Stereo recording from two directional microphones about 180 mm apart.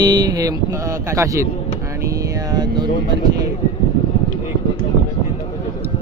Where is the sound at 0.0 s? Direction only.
25° right (ahead or behind).